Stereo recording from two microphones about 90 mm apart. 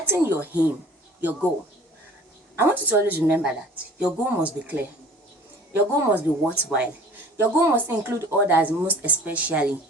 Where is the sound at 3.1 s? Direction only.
20° right (ahead or behind).